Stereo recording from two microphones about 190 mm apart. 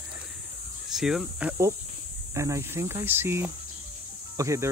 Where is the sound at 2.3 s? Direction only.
15° right (ahead or behind).